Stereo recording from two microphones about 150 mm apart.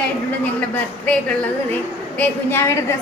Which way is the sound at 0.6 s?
10° left (ahead or behind).